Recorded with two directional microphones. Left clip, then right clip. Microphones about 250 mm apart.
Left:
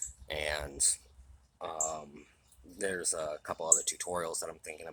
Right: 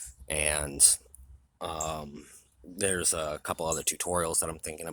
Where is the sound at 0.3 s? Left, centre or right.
Right.